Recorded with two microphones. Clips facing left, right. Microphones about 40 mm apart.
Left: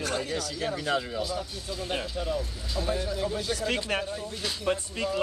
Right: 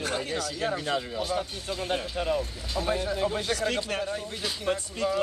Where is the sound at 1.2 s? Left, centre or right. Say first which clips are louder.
Right 3 dB; right.